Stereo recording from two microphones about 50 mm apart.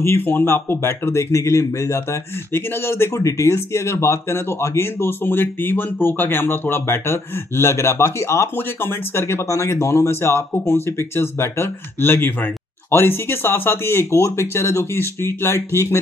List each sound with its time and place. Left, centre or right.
0.2 s speech: left
0.5 s speech: left
3.2 s speech: left
8.5 s speech: left